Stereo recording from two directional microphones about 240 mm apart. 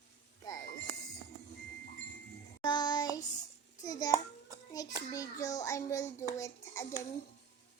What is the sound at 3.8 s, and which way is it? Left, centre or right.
A child's voice, centre.